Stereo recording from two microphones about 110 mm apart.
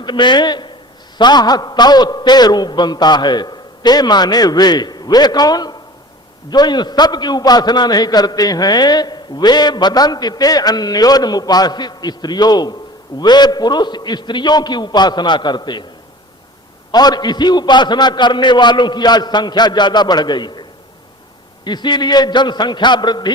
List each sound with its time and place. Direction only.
0.0 s a man's voice: 45° left (ahead or behind)
16.9 s a man's voice: 40° left (ahead or behind)